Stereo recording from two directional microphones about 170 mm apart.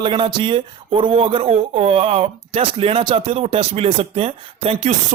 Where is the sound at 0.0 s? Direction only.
30° right (ahead or behind).